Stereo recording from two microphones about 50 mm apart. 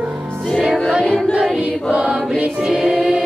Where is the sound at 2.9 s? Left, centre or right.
Centre.